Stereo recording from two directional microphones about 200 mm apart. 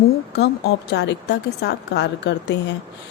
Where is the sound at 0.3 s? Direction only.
55° left (ahead or behind).